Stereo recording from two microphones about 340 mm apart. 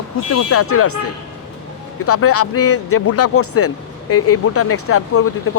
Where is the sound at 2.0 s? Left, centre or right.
Left.